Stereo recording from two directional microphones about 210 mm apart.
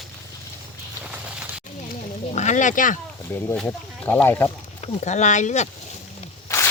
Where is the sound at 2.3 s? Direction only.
35° left (ahead or behind).